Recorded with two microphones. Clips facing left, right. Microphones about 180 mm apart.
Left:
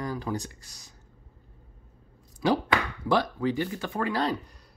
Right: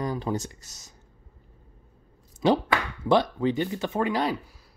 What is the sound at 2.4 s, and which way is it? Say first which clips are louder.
Speech: right 2 dB; 20° right (ahead or behind).